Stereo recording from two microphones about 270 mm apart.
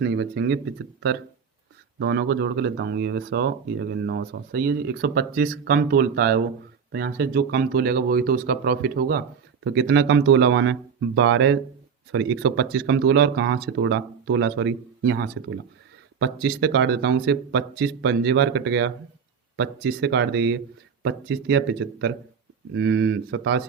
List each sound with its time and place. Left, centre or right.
0.0 s speech: right